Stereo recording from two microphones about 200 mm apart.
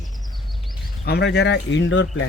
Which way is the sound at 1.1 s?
55° left (ahead or behind).